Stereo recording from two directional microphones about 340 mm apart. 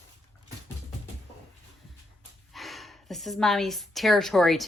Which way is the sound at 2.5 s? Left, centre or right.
Centre.